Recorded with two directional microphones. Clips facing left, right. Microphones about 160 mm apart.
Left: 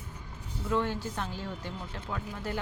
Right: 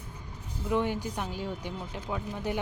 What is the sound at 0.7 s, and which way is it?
Speech, 15° right (ahead or behind).